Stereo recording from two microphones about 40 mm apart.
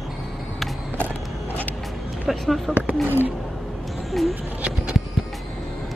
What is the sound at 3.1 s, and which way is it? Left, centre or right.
Speech, right.